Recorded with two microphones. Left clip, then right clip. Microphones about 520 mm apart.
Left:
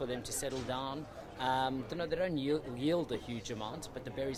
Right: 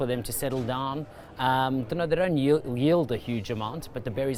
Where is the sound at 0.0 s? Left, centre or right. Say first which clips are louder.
Right 9 dB; right.